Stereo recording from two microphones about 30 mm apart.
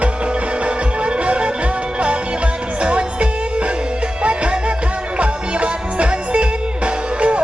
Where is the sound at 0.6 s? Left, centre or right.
Right.